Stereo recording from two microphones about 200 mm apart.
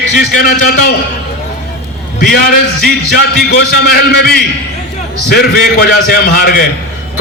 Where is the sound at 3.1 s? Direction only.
50° left (ahead or behind).